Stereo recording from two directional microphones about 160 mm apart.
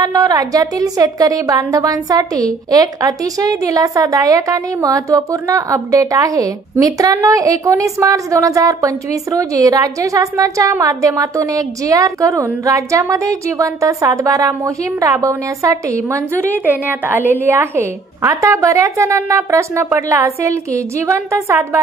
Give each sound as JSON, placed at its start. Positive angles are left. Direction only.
{"t": 0.0, "sound": "a woman's voice", "side_deg": -20}